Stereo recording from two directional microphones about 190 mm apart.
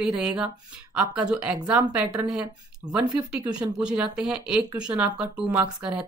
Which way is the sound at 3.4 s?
20° right (ahead or behind).